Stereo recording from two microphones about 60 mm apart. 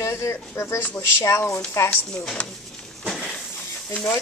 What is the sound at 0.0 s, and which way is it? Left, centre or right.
Speech, left.